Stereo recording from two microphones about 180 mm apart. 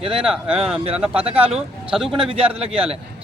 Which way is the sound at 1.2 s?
35° right (ahead or behind).